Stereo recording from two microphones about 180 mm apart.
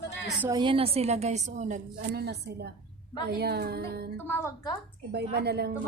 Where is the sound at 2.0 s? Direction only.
60° right (ahead or behind).